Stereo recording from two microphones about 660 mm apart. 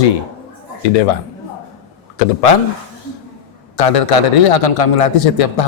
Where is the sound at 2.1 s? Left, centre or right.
Left.